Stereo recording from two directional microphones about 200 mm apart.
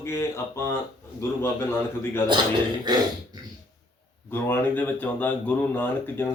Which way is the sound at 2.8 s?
20° right (ahead or behind).